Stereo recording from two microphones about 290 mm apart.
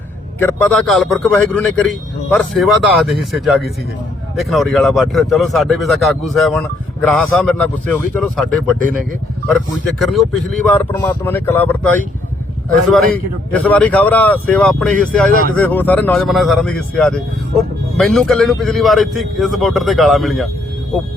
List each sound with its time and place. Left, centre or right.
0.3 s speech: centre
10.0 s speech: centre
13.5 s speech: centre
15.3 s speech: right
15.5 s speech: centre